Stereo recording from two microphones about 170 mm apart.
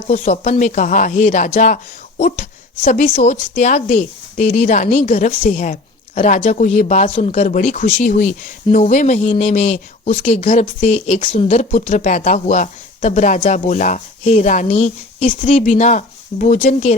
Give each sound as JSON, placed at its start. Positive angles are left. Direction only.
{"t": 0.1, "sound": "speech", "side_deg": 45}
{"t": 11.4, "sound": "speech", "side_deg": 45}